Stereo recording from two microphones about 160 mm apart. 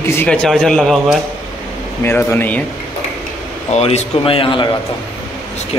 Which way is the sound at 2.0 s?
10° left (ahead or behind).